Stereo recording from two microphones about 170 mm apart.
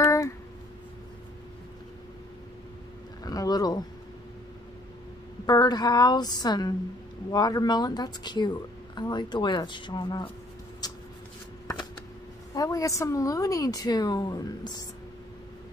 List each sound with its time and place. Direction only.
3.3 s speech: 20° left (ahead or behind)
5.5 s a woman's voice: 25° left (ahead or behind)
10.8 s shuffling cards: 25° left (ahead or behind)
12.5 s a woman's voice: 20° left (ahead or behind)